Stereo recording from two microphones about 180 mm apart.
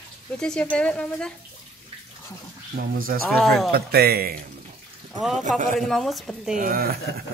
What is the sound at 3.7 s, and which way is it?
Speech, 60° right (ahead or behind).